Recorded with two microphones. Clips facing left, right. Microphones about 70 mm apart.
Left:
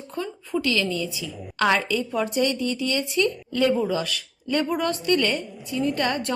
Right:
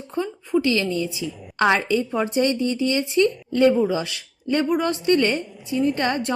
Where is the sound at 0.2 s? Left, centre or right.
Right.